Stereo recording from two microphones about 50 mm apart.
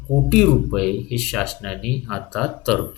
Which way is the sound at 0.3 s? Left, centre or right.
Centre.